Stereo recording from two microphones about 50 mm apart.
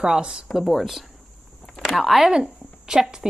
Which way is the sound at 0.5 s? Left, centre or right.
Centre.